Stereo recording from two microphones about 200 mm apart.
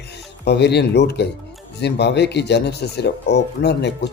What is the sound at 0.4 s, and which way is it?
Speech, 55° left (ahead or behind).